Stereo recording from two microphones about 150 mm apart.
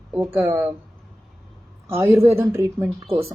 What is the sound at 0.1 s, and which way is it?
Speech, 10° right (ahead or behind).